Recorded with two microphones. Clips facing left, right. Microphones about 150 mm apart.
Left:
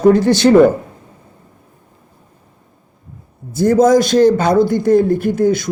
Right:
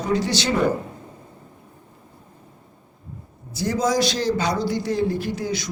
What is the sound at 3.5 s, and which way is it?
A man's voice, 50° left (ahead or behind).